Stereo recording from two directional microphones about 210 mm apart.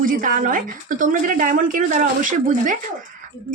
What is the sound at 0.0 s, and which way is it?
Speech, 40° right (ahead or behind).